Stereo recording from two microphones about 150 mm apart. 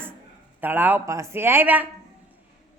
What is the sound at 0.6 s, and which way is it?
Speech, 10° right (ahead or behind).